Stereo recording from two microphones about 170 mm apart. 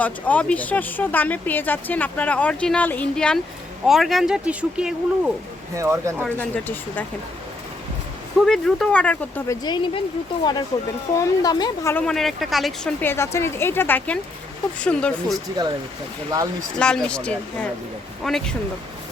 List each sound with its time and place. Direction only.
0.0 s speech: 10° left (ahead or behind)
5.7 s speech: 15° right (ahead or behind)
6.2 s speech: 10° left (ahead or behind)
8.4 s speech: centre (ahead or behind)
9.6 s speech: 30° left (ahead or behind)
11.1 s speech: 20° left (ahead or behind)
12.0 s speech: centre (ahead or behind)
13.0 s speech: 15° left (ahead or behind)
16.7 s speech: 5° left (ahead or behind)